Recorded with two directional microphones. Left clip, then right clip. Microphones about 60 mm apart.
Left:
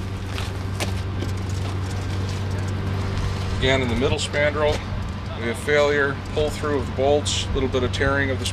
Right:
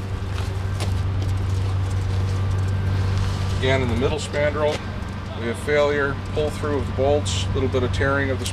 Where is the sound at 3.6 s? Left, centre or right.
Centre.